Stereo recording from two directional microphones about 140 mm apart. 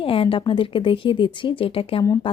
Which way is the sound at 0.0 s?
40° left (ahead or behind).